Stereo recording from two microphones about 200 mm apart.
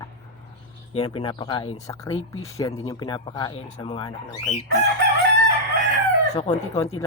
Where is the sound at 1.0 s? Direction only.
25° left (ahead or behind).